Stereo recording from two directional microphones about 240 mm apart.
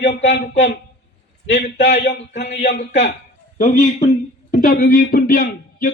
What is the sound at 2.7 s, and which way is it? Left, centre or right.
Speech, left.